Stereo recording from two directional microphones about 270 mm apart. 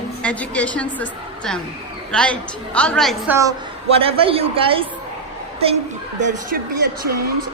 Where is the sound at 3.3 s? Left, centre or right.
Centre.